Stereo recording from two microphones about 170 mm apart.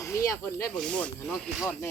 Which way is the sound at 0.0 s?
20° left (ahead or behind).